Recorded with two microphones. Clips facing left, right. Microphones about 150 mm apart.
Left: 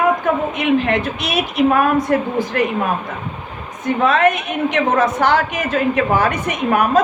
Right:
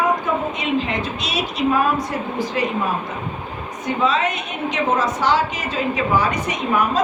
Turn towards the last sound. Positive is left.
turn(degrees=55)  # may be behind; listen again after turning